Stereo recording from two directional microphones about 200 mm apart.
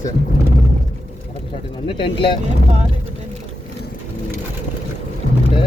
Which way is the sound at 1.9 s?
25° left (ahead or behind).